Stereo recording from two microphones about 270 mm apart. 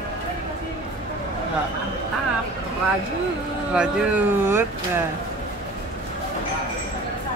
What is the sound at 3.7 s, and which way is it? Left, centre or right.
Speech, centre.